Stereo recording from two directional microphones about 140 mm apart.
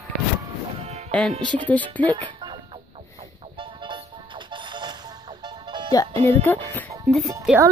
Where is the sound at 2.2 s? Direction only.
35° right (ahead or behind).